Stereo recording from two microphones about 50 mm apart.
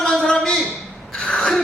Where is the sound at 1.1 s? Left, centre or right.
Centre.